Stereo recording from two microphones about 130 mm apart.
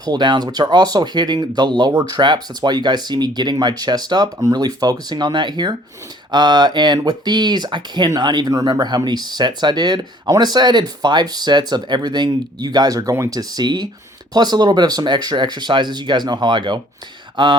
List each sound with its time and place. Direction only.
0.0 s speech: 35° right (ahead or behind)